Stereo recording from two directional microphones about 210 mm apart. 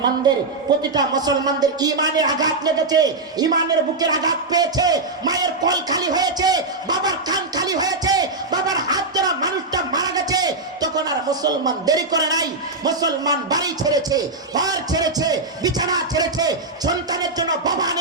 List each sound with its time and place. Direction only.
0.8 s a man's voice: 20° right (ahead or behind)